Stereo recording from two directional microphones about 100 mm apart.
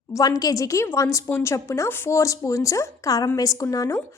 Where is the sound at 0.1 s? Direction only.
35° left (ahead or behind).